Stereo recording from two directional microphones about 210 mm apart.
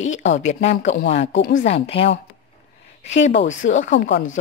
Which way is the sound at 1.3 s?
60° left (ahead or behind).